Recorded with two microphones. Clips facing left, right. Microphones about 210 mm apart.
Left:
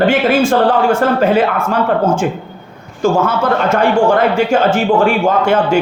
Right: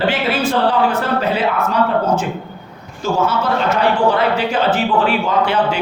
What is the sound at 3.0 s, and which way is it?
A man's voice, 50° left (ahead or behind).